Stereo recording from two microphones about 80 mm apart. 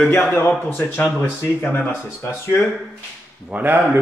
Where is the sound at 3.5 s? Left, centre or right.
Right.